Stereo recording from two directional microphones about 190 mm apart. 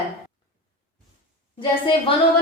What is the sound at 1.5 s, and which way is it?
Speech, 25° left (ahead or behind).